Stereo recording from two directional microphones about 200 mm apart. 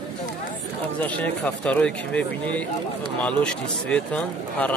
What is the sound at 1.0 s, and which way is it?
Speech, 5° left (ahead or behind).